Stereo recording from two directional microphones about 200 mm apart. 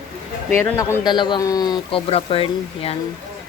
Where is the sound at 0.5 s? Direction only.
10° left (ahead or behind); by 2.9 s 30° left (ahead or behind).